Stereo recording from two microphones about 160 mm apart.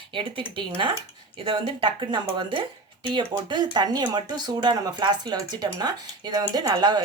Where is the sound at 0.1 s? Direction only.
30° right (ahead or behind).